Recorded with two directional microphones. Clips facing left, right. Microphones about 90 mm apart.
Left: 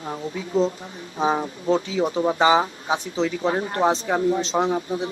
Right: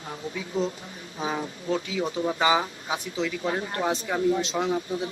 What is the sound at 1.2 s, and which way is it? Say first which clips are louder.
Speech: left 8 dB; 35° left (ahead or behind).